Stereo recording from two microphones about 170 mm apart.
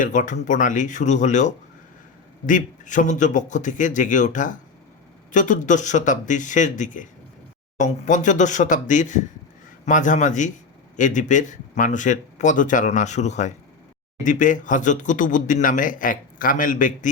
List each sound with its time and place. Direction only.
0.0 s speech: 50° left (ahead or behind)